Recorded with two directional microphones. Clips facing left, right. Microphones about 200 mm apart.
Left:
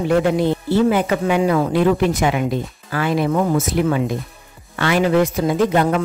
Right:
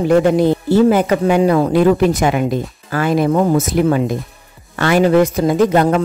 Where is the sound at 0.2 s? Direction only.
45° right (ahead or behind).